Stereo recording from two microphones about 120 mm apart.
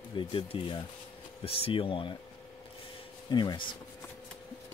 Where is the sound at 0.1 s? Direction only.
45° left (ahead or behind).